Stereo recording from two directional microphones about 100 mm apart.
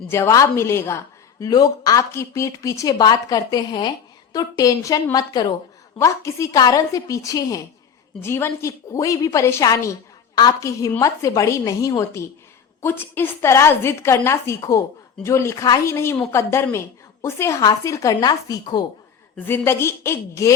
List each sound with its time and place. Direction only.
0.1 s a woman's voice: 30° left (ahead or behind)
1.5 s speech: 40° left (ahead or behind)
3.7 s a woman's voice: 50° left (ahead or behind)
6.0 s speech: 30° left (ahead or behind)
8.2 s a woman's voice: 25° left (ahead or behind)
12.8 s a woman's voice: 20° left (ahead or behind); by 18.8 s 45° left (ahead or behind)
19.5 s a woman's voice: 25° left (ahead or behind)